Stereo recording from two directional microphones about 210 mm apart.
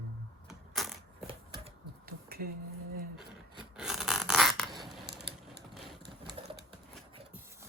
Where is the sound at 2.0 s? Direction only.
45° right (ahead or behind).